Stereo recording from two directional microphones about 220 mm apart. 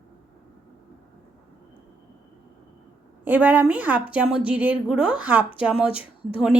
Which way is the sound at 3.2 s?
5° right (ahead or behind).